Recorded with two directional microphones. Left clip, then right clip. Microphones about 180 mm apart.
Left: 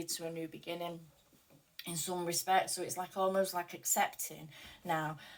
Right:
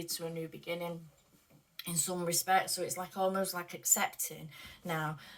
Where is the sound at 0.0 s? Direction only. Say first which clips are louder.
Right 1 dB; 20° left (ahead or behind).